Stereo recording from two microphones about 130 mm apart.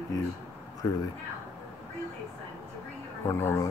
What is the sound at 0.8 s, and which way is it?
Speech, 25° left (ahead or behind).